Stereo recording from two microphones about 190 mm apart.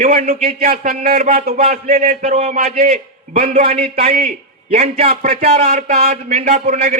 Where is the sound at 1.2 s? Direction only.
35° right (ahead or behind).